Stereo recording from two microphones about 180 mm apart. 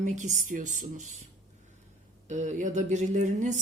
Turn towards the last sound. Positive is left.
turn(degrees=-45)  # may be behind; listen again after turning